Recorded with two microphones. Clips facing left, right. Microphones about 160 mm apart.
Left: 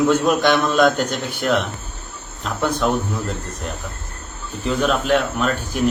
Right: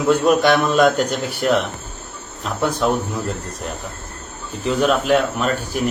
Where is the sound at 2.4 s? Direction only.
5° right (ahead or behind).